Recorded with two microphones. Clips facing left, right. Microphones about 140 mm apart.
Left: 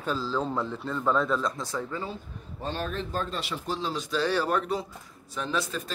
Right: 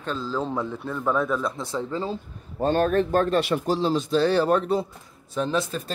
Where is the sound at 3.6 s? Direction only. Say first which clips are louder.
Right 8 dB; 30° right (ahead or behind).